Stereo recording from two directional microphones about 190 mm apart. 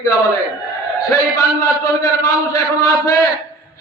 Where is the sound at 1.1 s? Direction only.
15° left (ahead or behind).